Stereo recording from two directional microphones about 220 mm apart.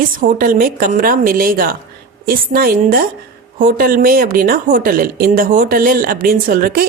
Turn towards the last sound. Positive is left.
turn(degrees=-40)  # may be behind; listen again after turning